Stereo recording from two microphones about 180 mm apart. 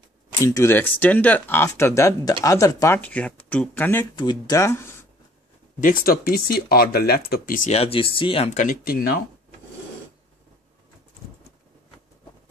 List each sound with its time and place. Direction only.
0.4 s speech: 15° left (ahead or behind)
3.0 s speech: 10° left (ahead or behind)
4.1 s speech: 25° left (ahead or behind)
5.8 s speech: 50° left (ahead or behind); by 8.5 s 30° left (ahead or behind)
8.5 s speech: 50° left (ahead or behind)